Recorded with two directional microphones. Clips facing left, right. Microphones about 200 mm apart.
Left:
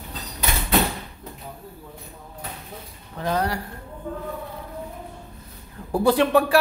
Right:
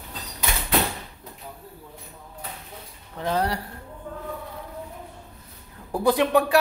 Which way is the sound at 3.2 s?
25° right (ahead or behind).